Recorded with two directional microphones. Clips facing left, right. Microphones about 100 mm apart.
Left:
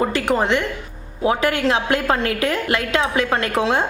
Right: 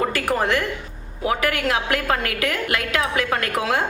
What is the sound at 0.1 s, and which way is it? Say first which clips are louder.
A woman's voice: left 3 dB; 25° left (ahead or behind).